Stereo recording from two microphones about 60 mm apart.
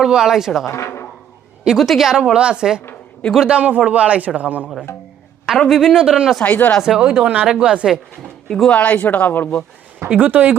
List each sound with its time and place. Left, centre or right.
0.0 s a woman's voice: centre
0.7 s speech: left
1.6 s a woman's voice: centre; by 4.7 s right
5.6 s a woman's voice: centre
6.4 s speech: left
6.8 s a woman's voice: centre
7.1 s speech: right
7.4 s a woman's voice: centre
8.4 s speech: centre
8.7 s speech: left
10.2 s speech: right